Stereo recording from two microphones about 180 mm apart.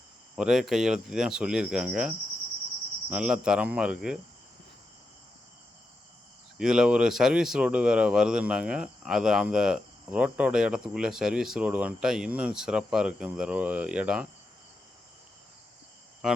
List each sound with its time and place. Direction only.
0.3 s speech: centre (ahead or behind)
6.6 s speech: 5° right (ahead or behind)